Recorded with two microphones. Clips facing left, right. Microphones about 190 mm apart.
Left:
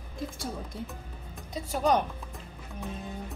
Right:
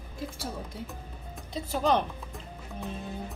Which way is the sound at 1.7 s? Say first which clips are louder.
Even; 10° left (ahead or behind).